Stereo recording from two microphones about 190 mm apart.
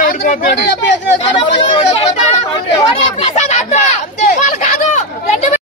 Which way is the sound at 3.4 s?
35° left (ahead or behind).